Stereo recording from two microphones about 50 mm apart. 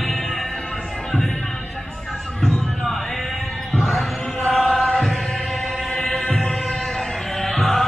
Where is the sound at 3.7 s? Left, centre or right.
Centre.